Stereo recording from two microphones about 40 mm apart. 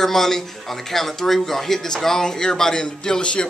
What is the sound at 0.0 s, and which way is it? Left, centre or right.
Speech, centre.